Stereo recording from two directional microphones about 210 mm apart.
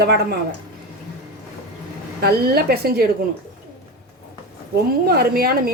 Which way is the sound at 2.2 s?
50° right (ahead or behind).